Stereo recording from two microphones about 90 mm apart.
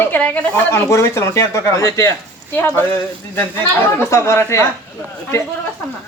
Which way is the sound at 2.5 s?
25° left (ahead or behind).